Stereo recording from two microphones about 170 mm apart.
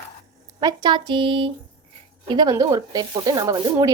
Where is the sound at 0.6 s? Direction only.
25° right (ahead or behind).